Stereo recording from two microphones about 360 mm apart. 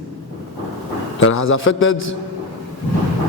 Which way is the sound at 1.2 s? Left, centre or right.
Left.